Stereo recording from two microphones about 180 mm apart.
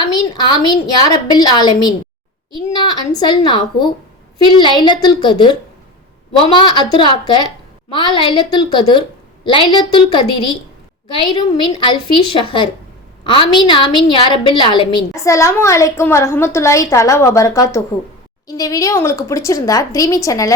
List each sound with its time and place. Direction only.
0.0 s a woman's voice: 25° left (ahead or behind)